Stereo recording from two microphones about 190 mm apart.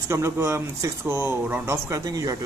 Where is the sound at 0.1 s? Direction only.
15° right (ahead or behind).